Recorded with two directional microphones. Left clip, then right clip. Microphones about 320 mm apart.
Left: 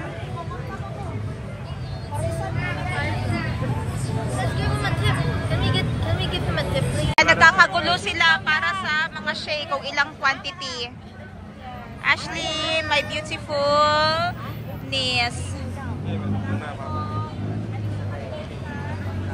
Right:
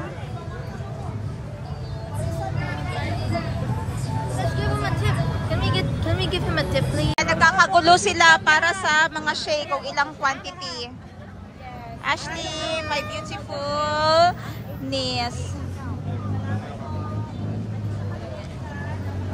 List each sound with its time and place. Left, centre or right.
4.6 s vehicle: right
7.2 s speech: centre
12.0 s speech: centre
14.9 s speech: centre